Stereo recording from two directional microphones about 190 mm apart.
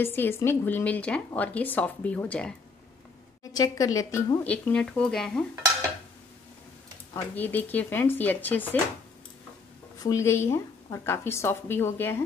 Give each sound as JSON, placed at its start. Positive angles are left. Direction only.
{"t": 0.0, "sound": "a woman's voice", "side_deg": 10}
{"t": 3.5, "sound": "speech", "side_deg": 20}
{"t": 4.5, "sound": "speech", "side_deg": 5}
{"t": 7.2, "sound": "a woman's voice", "side_deg": 10}
{"t": 10.0, "sound": "a woman's voice", "side_deg": 15}